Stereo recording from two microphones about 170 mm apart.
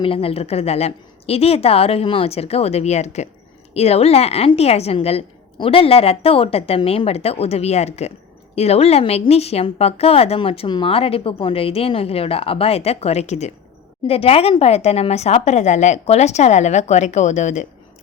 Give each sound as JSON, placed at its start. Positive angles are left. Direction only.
{"t": 0.0, "sound": "a woman's voice", "side_deg": 35}